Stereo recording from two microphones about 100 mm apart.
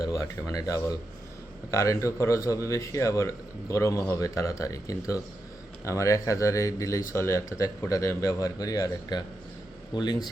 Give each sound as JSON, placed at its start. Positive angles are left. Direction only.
{"t": 0.0, "sound": "a man's voice", "side_deg": 35}